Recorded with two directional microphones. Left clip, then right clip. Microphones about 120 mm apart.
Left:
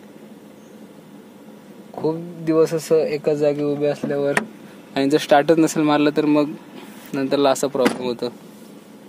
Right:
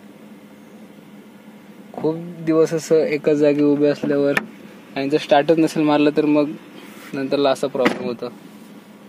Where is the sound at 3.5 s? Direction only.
45° right (ahead or behind).